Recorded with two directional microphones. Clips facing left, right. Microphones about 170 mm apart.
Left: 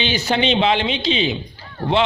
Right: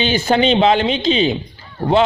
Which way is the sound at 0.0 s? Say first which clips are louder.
Right 5 dB; 50° right (ahead or behind).